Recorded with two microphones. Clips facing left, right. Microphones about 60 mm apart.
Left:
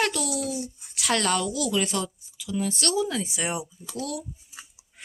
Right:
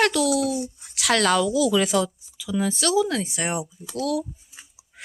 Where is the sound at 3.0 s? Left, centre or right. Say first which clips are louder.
Right 4 dB; right.